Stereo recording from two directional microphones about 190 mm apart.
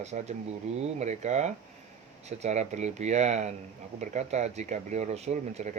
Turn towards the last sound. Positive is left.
turn(degrees=-35)  # may be behind; listen again after turning